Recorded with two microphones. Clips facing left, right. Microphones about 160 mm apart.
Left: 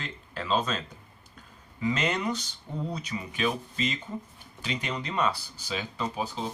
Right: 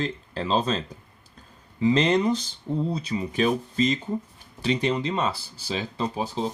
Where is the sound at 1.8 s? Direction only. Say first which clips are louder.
Right 8 dB; 30° right (ahead or behind).